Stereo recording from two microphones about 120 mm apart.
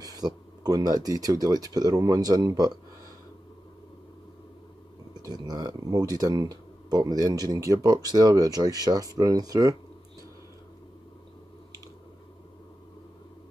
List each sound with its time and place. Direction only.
0.0 s speech: 35° right (ahead or behind)
5.1 s speech: 35° right (ahead or behind)